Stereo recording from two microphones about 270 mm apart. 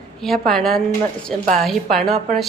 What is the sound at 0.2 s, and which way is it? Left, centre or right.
A woman's voice, centre.